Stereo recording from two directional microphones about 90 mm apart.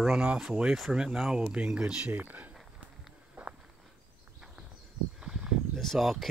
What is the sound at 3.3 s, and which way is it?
Walk, 15° right (ahead or behind).